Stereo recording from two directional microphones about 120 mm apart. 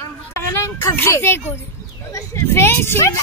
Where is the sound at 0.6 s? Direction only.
20° left (ahead or behind).